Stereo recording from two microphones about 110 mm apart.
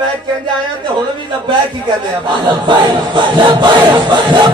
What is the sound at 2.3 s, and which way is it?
Chant, 45° right (ahead or behind).